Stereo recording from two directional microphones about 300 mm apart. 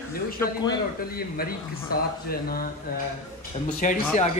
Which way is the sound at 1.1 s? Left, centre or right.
Left.